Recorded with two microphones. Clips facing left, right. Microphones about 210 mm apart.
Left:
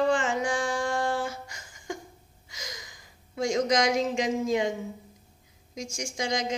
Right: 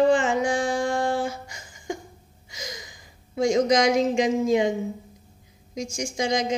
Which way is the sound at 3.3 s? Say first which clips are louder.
Right 5 dB; 20° right (ahead or behind).